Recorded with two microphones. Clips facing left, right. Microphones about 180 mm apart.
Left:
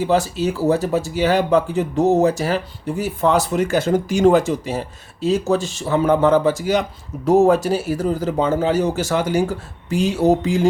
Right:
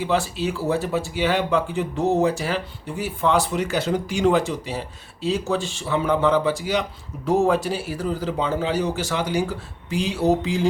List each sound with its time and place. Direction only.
0.0 s speech: 40° left (ahead or behind)